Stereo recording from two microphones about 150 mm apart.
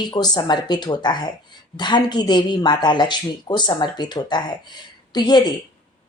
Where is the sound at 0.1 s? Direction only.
30° left (ahead or behind).